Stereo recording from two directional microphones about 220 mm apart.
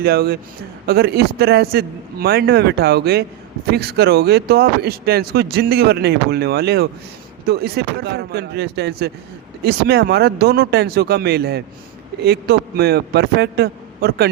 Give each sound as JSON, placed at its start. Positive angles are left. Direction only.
{"t": 0.0, "sound": "speech", "side_deg": -45}